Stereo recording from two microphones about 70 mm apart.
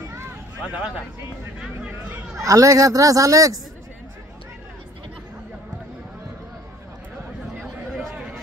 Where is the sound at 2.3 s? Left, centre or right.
Right.